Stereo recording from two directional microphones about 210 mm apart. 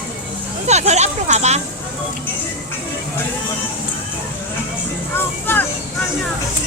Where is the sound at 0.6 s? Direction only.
30° right (ahead or behind).